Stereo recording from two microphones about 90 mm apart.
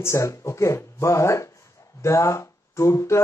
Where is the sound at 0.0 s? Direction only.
35° left (ahead or behind).